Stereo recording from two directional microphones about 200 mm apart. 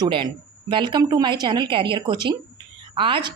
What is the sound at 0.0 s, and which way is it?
A woman's voice, 25° right (ahead or behind).